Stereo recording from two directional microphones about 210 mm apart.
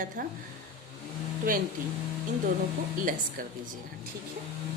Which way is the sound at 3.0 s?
40° right (ahead or behind).